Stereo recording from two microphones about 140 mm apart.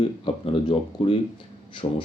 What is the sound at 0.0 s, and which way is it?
Speech, 40° left (ahead or behind).